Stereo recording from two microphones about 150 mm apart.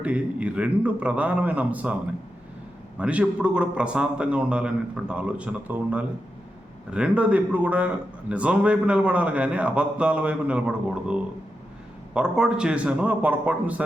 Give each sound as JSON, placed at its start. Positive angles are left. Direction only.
{"t": 0.0, "sound": "a man's voice", "side_deg": -10}
{"t": 3.0, "sound": "a man's voice", "side_deg": -10}